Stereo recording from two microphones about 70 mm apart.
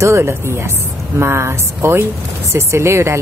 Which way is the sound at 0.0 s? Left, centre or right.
Right.